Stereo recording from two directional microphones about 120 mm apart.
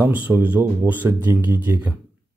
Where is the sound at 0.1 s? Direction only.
15° right (ahead or behind).